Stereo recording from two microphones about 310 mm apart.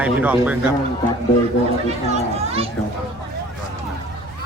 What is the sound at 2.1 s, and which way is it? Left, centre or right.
Speech, centre.